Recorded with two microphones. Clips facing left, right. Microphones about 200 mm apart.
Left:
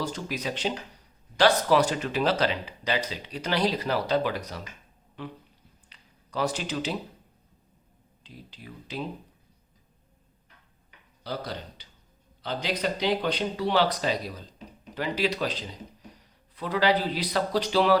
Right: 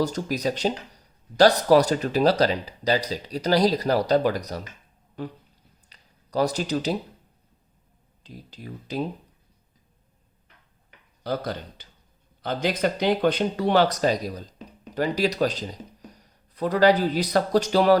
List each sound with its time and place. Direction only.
0.0 s speech: 40° right (ahead or behind)
5.9 s a sound: 40° right (ahead or behind)
8.2 s speech: 40° right (ahead or behind)
11.2 s speech: 50° right (ahead or behind)